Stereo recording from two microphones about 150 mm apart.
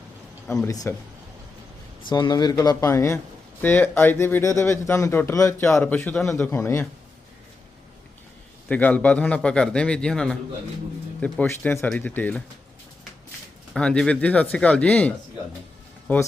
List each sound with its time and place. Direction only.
0.4 s speech: 5° left (ahead or behind)
0.7 s speech: 25° left (ahead or behind)
2.0 s speech: 30° left (ahead or behind)
8.7 s speech: 10° left (ahead or behind)
13.7 s speech: 5° left (ahead or behind)